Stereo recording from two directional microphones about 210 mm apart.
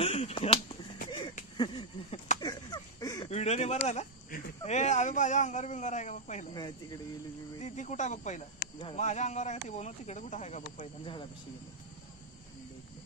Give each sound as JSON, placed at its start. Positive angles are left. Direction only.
{"t": 0.0, "sound": "finger snapping", "side_deg": 25}
{"t": 1.6, "sound": "a sound", "side_deg": 20}
{"t": 3.3, "sound": "speech", "side_deg": 30}
{"t": 6.5, "sound": "speech", "side_deg": 20}
{"t": 7.6, "sound": "speech", "side_deg": 35}